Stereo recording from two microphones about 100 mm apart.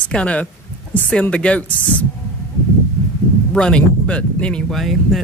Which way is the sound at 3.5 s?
10° left (ahead or behind).